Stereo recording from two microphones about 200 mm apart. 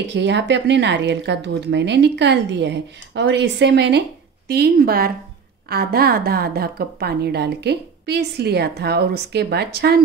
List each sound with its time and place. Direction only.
0.1 s a woman's voice: 60° right (ahead or behind)